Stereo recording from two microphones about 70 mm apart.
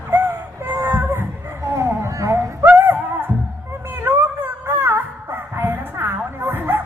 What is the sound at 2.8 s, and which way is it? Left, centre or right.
Music, right.